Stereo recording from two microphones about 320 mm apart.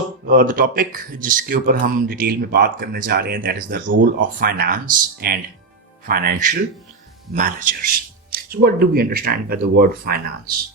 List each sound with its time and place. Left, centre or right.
0.3 s speech: right